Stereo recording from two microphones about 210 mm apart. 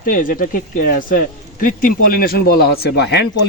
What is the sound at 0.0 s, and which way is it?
A man's voice, 40° left (ahead or behind).